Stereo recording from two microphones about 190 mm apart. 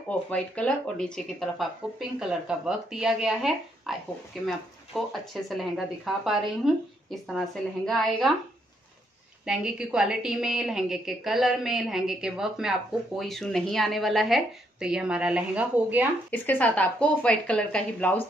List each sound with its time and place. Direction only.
0.3 s a woman's voice: 5° left (ahead or behind)
9.5 s a woman's voice: 5° right (ahead or behind)
16.3 s speech: 10° left (ahead or behind)